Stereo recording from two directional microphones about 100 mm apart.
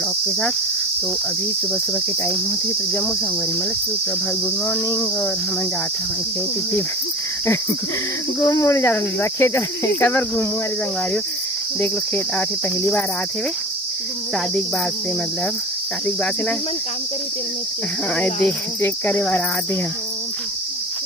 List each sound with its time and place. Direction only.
4.9 s cricket: 35° left (ahead or behind)
8.4 s cricket: 35° left (ahead or behind)
11.8 s cricket: 15° left (ahead or behind)
18.1 s cricket: 10° left (ahead or behind)